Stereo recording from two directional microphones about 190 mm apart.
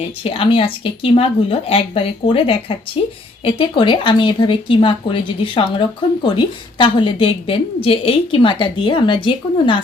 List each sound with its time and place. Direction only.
0.2 s a woman's voice: 30° left (ahead or behind)